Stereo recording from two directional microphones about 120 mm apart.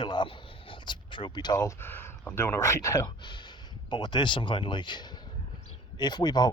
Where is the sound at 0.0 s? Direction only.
40° left (ahead or behind).